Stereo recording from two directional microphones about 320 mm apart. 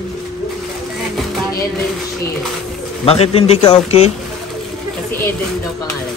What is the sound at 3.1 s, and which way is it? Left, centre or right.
Speech, centre.